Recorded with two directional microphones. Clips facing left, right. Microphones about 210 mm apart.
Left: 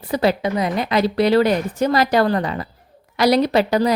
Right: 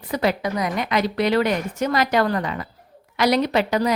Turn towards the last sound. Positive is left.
turn(degrees=35)  # may be behind; listen again after turning